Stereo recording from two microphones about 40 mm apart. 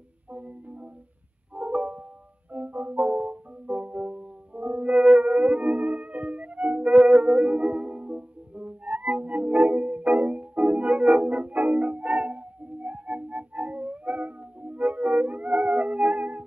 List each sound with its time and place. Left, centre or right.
0.3 s music: right